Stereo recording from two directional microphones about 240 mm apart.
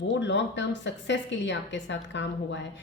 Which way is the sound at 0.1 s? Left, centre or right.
Left.